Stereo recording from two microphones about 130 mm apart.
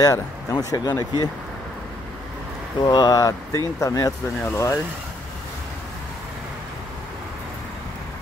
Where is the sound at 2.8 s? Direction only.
30° left (ahead or behind).